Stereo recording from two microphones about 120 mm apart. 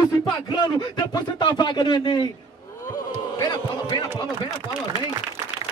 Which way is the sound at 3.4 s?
35° left (ahead or behind).